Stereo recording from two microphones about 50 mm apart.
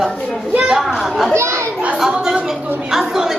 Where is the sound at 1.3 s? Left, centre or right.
Right.